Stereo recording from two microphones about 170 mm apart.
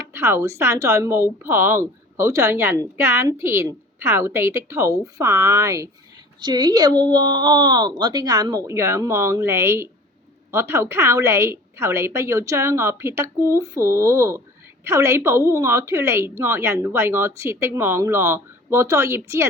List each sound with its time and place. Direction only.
0.0 s speech: 15° right (ahead or behind)